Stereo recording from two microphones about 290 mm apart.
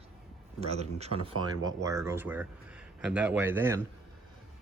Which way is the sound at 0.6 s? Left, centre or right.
Right.